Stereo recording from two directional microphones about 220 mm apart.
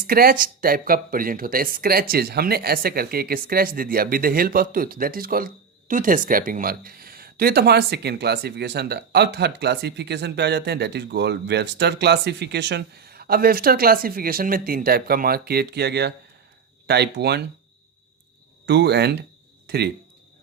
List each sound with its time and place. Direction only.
0.1 s speech: 40° right (ahead or behind)
18.6 s speech: 50° right (ahead or behind)